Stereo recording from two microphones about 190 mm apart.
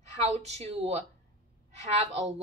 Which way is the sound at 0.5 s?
35° right (ahead or behind).